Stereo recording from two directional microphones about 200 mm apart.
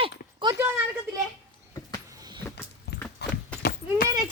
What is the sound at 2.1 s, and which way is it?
Vehicle, 20° right (ahead or behind).